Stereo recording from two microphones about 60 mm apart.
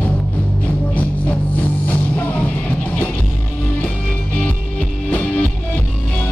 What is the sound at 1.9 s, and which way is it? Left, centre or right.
Music, left.